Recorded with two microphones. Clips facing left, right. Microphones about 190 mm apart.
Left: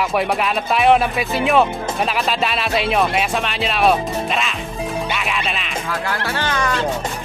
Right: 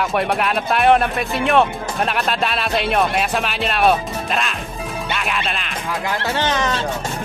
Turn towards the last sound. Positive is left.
turn(degrees=-20)  # may be behind; listen again after turning